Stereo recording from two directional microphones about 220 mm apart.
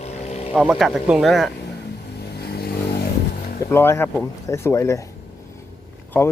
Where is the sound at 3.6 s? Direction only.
10° left (ahead or behind).